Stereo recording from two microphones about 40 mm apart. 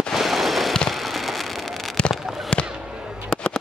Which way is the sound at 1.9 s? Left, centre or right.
Left.